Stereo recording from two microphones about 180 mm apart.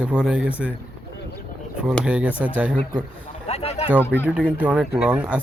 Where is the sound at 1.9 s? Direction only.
5° right (ahead or behind).